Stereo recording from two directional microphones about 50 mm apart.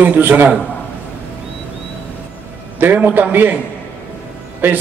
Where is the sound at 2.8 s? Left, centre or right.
Right.